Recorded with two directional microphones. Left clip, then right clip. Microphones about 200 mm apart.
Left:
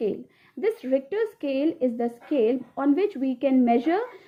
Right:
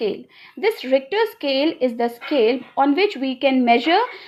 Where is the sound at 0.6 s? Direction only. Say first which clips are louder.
Right 5 dB; 20° right (ahead or behind).